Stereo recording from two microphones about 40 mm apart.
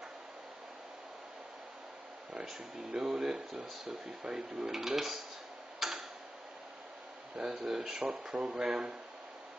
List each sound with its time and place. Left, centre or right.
2.9 s speech: centre
5.8 s tick-tock: centre
7.6 s speech: centre
8.3 s speech: right
8.6 s speech: centre